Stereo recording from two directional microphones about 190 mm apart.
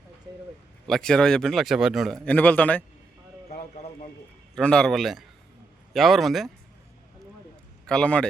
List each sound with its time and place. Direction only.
0.9 s a man's voice: centre (ahead or behind)
3.5 s clip-clop: 35° left (ahead or behind)
4.5 s a man's voice: 5° left (ahead or behind)
7.9 s a man's voice: 5° left (ahead or behind)